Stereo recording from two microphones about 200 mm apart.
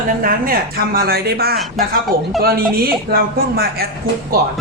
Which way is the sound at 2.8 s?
50° right (ahead or behind).